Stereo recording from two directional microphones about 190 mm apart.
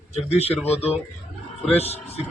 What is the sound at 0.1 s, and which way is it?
A man's voice, 35° left (ahead or behind).